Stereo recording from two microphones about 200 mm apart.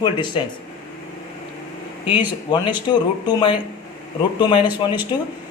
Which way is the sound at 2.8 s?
20° left (ahead or behind).